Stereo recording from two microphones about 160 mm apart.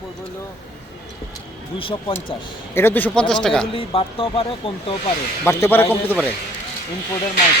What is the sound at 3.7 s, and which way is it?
Speech, 35° left (ahead or behind).